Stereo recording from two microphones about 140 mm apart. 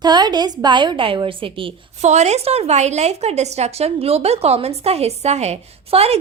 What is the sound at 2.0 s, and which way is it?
A woman's voice, 55° right (ahead or behind).